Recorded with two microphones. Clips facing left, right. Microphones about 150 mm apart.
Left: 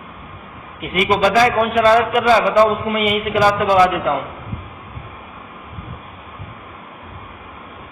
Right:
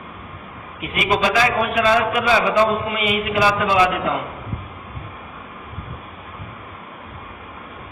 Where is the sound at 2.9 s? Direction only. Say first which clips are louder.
Left 3 dB; 40° left (ahead or behind).